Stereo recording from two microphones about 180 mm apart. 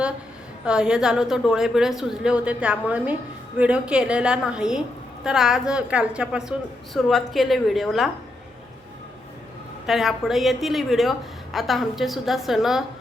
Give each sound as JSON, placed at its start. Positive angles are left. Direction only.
{"t": 0.6, "sound": "a woman's voice", "side_deg": -5}
{"t": 9.8, "sound": "a woman's voice", "side_deg": 0}